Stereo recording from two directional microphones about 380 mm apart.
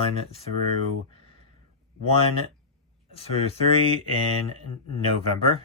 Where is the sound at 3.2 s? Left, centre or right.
Centre.